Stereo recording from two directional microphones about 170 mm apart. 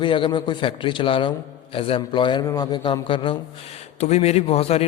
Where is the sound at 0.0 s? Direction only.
30° left (ahead or behind).